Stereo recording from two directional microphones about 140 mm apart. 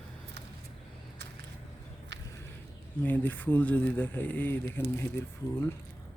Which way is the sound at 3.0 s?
10° left (ahead or behind).